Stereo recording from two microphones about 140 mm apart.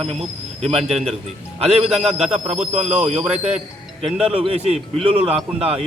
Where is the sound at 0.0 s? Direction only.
45° right (ahead or behind).